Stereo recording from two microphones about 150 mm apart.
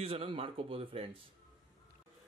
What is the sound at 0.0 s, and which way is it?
Speech, 40° right (ahead or behind).